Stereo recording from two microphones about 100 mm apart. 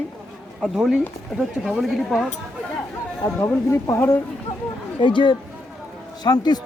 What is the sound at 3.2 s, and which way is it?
Speech, 30° left (ahead or behind).